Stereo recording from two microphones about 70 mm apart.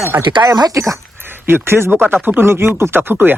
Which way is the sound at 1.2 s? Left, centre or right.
Right.